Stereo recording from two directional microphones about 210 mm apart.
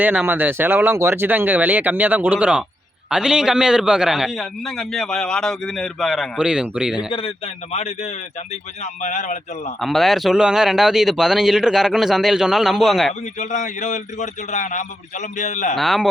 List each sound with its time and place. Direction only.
0.0 s a man's voice: 10° right (ahead or behind)
7.1 s a man's voice: 25° left (ahead or behind)
9.8 s a man's voice: centre (ahead or behind)
13.4 s a man's voice: 35° left (ahead or behind)
15.7 s a man's voice: centre (ahead or behind)